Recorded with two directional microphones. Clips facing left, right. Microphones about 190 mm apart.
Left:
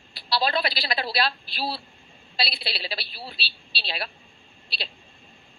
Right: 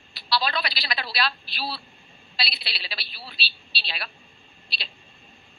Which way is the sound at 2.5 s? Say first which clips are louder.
Left 6 dB; 30° left (ahead or behind).